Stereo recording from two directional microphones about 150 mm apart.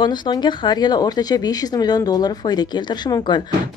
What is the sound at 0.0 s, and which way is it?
Speech, 30° left (ahead or behind).